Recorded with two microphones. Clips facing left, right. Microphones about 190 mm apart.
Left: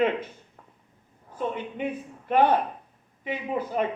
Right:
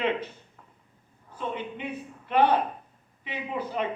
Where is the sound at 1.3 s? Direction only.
45° left (ahead or behind).